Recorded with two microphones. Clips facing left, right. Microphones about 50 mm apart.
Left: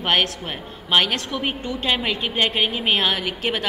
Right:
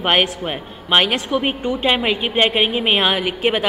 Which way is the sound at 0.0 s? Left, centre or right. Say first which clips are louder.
Right 4 dB; centre.